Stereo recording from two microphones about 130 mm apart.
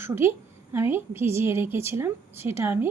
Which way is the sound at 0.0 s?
20° right (ahead or behind).